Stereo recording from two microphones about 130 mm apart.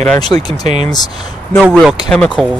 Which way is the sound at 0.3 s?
20° left (ahead or behind).